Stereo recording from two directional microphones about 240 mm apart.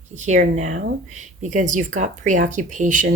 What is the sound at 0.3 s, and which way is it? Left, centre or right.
Speech, right.